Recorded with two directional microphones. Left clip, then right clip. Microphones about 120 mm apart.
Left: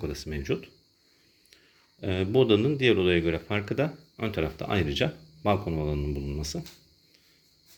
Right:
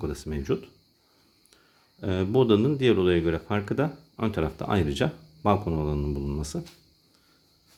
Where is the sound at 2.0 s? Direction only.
40° right (ahead or behind).